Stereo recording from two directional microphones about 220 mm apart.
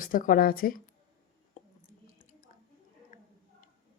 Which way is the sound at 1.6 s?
30° left (ahead or behind).